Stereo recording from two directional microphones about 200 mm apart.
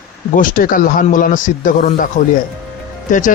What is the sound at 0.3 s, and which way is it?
A man's voice, 45° left (ahead or behind).